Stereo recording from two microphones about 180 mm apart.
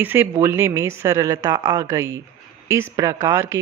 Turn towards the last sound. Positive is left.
turn(degrees=-15)  # may be behind; listen again after turning